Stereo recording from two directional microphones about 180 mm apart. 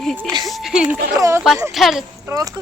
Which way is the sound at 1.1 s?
15° right (ahead or behind).